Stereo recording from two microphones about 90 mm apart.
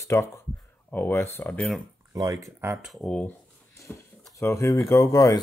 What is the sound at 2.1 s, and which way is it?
Speech, 40° right (ahead or behind).